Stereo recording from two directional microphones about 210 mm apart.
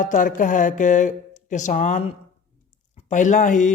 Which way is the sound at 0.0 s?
40° left (ahead or behind).